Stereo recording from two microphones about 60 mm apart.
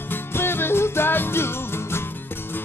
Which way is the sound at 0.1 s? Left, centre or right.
Left.